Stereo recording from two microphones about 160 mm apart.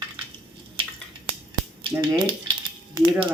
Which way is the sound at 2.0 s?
30° right (ahead or behind).